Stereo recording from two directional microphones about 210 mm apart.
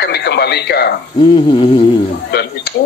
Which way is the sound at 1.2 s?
25° left (ahead or behind).